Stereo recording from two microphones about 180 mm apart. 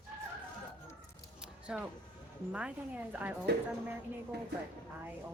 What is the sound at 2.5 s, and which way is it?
Speech, 5° right (ahead or behind).